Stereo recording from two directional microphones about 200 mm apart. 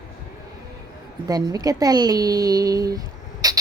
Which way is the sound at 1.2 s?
20° right (ahead or behind).